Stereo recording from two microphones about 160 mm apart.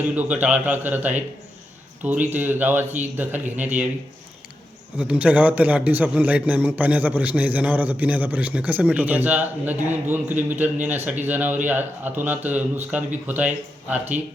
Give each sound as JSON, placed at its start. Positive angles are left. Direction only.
{"t": 0.0, "sound": "a man's voice", "side_deg": -10}
{"t": 4.9, "sound": "a man's voice", "side_deg": -10}